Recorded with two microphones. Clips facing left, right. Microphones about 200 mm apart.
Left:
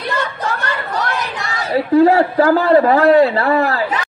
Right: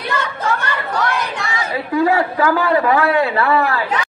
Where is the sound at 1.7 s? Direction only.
35° left (ahead or behind).